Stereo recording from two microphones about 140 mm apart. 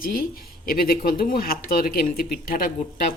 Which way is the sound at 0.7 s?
90° left.